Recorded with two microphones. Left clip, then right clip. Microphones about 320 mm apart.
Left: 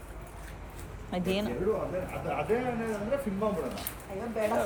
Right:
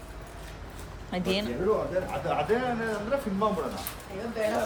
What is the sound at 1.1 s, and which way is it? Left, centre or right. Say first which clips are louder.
Speech: right 2 dB; centre.